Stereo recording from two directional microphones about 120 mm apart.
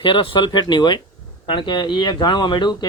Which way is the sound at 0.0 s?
45° left (ahead or behind).